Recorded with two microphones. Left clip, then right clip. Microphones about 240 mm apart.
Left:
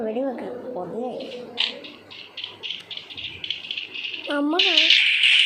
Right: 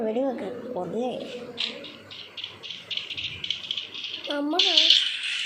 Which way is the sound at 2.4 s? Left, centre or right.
Centre.